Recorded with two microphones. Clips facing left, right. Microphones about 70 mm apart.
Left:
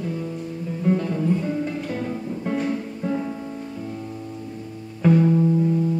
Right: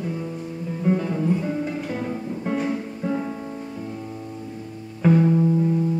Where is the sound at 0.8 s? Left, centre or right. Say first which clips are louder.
Even; centre.